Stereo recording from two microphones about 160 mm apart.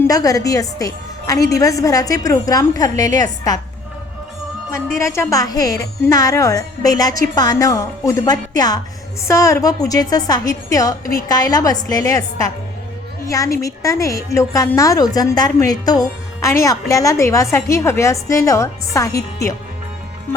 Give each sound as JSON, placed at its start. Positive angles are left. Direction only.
{"t": 0.0, "sound": "a woman's voice", "side_deg": 20}
{"t": 4.7, "sound": "a woman's voice", "side_deg": 20}